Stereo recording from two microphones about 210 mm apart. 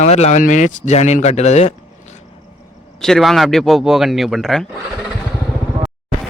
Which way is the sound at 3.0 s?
Centre (ahead or behind).